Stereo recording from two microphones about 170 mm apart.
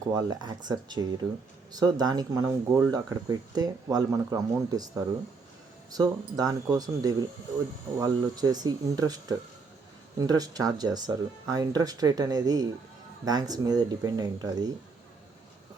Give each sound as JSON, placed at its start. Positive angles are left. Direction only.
{"t": 0.1, "sound": "speech", "side_deg": -20}